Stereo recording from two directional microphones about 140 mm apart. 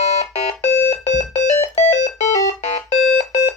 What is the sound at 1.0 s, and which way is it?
Music, 55° left (ahead or behind).